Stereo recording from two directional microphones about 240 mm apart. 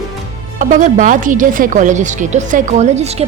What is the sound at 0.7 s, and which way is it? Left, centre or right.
A woman's voice, right.